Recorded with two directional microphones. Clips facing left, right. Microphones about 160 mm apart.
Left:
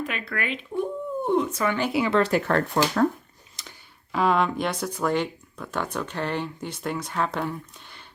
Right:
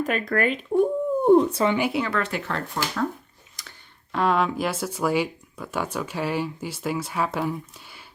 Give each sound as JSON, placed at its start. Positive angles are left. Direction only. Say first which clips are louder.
{"t": 0.0, "sound": "speech", "louder": "right 7 dB", "side_deg": -40}
{"t": 1.6, "sound": "speech", "louder": "right 3 dB", "side_deg": -15}
{"t": 2.0, "sound": "speech", "louder": "left 5 dB", "side_deg": 30}
{"t": 2.3, "sound": "speech", "louder": "left 7 dB", "side_deg": 55}
{"t": 3.6, "sound": "a sound", "louder": "left 1 dB", "side_deg": 25}
{"t": 4.1, "sound": "speech", "louder": "even", "side_deg": 0}